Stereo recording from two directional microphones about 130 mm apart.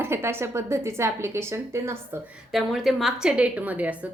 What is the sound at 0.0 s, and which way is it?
A woman's voice, 20° right (ahead or behind).